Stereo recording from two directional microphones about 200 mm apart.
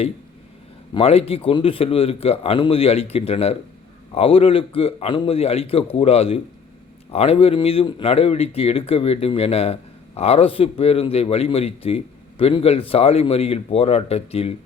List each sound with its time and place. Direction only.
0.9 s a man's voice: 30° left (ahead or behind)